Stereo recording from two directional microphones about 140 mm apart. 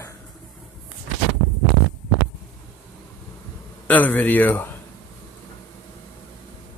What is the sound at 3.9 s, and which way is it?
Speech, 15° left (ahead or behind).